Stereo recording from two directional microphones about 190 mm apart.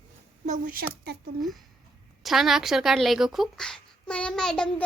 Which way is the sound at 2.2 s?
Centre (ahead or behind).